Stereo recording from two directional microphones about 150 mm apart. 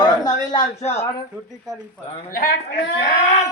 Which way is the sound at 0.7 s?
45° left (ahead or behind).